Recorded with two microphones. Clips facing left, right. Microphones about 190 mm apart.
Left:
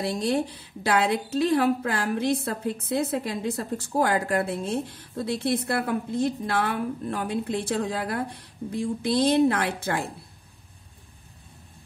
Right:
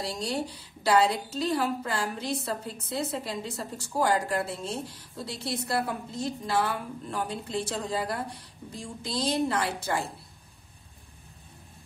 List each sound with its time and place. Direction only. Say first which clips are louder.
0.0 s a woman's voice: left 6 dB; 55° left (ahead or behind)